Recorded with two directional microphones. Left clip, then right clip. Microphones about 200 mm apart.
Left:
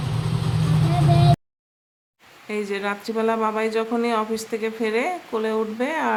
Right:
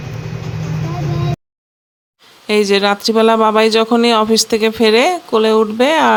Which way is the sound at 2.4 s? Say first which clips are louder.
Right 13 dB; 40° right (ahead or behind).